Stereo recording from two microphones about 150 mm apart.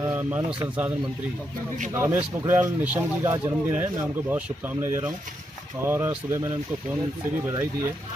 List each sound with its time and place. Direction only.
0.0 s speech: 10° right (ahead or behind)
2.0 s speech: 15° right (ahead or behind)
4.8 s speech: 15° right (ahead or behind)
7.4 s speech: 15° right (ahead or behind)